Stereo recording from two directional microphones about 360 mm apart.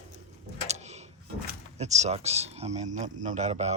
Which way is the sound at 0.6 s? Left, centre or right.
Centre.